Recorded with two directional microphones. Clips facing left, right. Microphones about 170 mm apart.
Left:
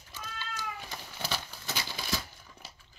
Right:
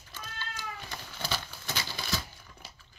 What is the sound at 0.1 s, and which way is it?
Cat, 5° left (ahead or behind).